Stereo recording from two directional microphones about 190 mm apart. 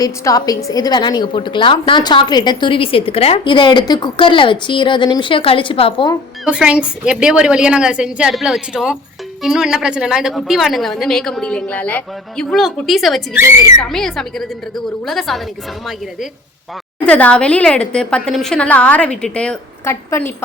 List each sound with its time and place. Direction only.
0.0 s a woman's voice: 20° left (ahead or behind)
6.4 s a woman's voice: 5° right (ahead or behind)
13.4 s a child's voice: 20° right (ahead or behind)
13.9 s a woman's voice: centre (ahead or behind)
17.0 s a woman's voice: 5° left (ahead or behind)